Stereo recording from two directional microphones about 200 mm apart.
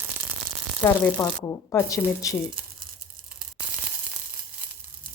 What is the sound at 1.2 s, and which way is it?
A woman's voice, 15° left (ahead or behind).